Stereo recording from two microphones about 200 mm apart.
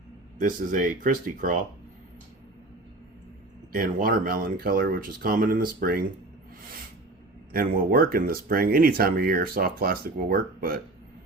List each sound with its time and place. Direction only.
0.3 s speech: 40° right (ahead or behind)
3.7 s speech: 45° right (ahead or behind)
7.5 s speech: 45° right (ahead or behind)